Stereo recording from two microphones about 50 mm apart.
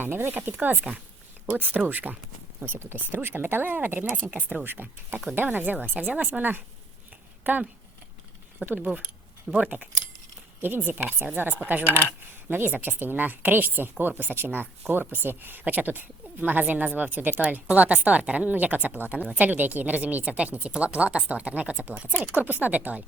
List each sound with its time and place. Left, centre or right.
0.0 s a woman's voice: right
2.6 s speech: right
4.6 s a woman's voice: right
10.6 s a woman's voice: right
12.5 s a woman's voice: right